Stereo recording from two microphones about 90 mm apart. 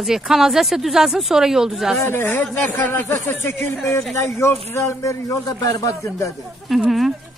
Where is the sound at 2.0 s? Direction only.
25° left (ahead or behind).